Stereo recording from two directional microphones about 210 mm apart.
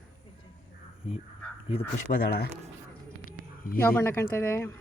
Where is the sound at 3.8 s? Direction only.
10° left (ahead or behind).